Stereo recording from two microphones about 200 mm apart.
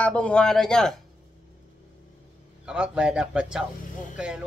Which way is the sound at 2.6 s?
5° right (ahead or behind).